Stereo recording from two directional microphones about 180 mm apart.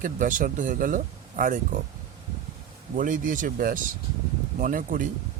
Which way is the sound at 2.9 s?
45° right (ahead or behind).